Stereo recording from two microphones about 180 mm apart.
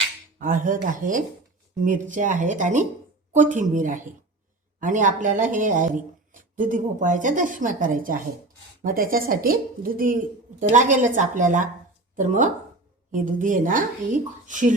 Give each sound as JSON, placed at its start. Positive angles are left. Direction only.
{"t": 0.3, "sound": "speech", "side_deg": -50}